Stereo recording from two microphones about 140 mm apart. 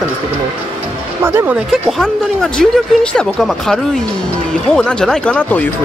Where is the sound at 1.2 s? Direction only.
15° right (ahead or behind).